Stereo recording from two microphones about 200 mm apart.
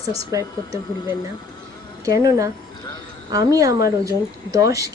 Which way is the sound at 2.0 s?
15° right (ahead or behind).